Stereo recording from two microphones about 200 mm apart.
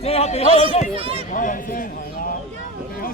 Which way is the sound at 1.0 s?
30° right (ahead or behind).